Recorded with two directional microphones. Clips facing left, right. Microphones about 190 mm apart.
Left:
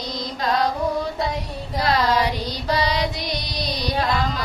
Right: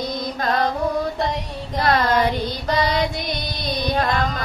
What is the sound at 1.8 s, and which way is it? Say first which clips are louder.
Music: right 2 dB; 55° right (ahead or behind).